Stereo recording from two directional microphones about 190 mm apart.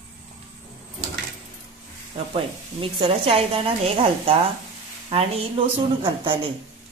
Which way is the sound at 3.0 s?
30° right (ahead or behind).